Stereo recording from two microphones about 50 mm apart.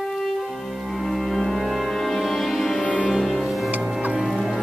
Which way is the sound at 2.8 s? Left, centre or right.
Left.